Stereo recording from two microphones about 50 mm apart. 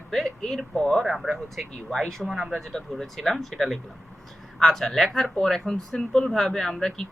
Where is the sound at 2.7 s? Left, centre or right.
Centre.